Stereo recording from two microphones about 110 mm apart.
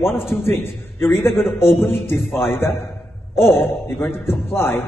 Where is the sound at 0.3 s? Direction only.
20° left (ahead or behind).